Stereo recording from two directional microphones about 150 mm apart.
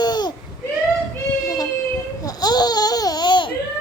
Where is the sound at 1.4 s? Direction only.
25° left (ahead or behind).